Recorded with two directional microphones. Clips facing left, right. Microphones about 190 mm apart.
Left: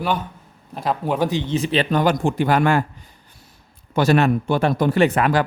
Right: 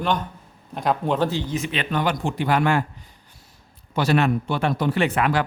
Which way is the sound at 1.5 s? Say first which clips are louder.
Left 6 dB; 35° left (ahead or behind).